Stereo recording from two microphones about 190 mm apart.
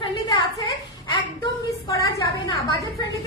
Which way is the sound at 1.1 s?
20° left (ahead or behind).